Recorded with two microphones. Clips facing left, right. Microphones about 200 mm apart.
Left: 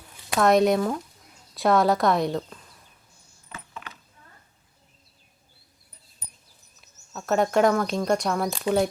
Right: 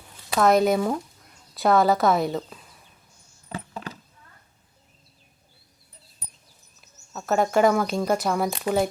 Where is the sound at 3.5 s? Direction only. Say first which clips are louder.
Right 7 dB; 35° right (ahead or behind).